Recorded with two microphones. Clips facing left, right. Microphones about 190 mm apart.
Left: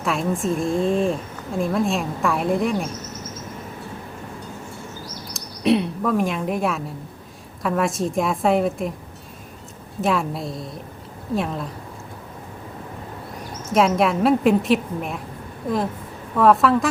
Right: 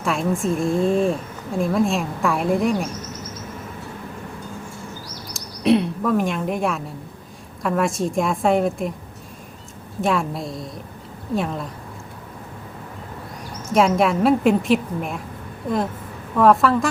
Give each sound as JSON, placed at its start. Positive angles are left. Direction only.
{"t": 0.0, "sound": "a woman's voice", "side_deg": 0}
{"t": 5.3, "sound": "a sound", "side_deg": 0}
{"t": 7.6, "sound": "a woman's voice", "side_deg": 0}
{"t": 10.0, "sound": "a woman's voice", "side_deg": 0}
{"t": 13.7, "sound": "a woman's voice", "side_deg": 0}
{"t": 16.4, "sound": "a woman's voice", "side_deg": 0}